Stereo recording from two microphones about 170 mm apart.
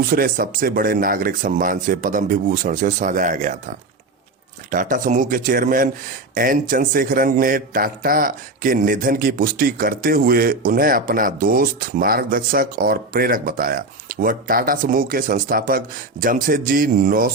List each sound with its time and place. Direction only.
0.0 s speech: 60° right (ahead or behind)
4.7 s speech: 50° right (ahead or behind)